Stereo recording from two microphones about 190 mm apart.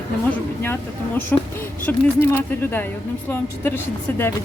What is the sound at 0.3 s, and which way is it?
A woman's voice, 10° left (ahead or behind).